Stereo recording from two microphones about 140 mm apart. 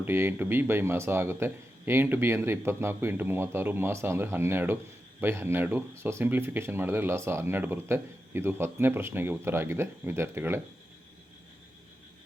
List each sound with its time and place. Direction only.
0.0 s a man's voice: 15° right (ahead or behind)